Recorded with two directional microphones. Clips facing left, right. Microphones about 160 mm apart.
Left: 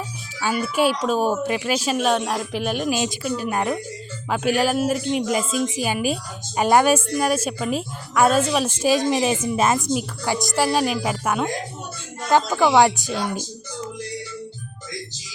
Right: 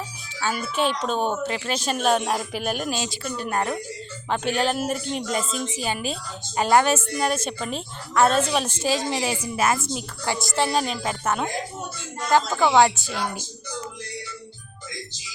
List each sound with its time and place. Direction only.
0.3 s speech: 5° left (ahead or behind)
2.9 s a woman's voice: 20° left (ahead or behind)
3.2 s a woman's voice: 5° left (ahead or behind)
10.6 s a woman's voice: 5° left (ahead or behind)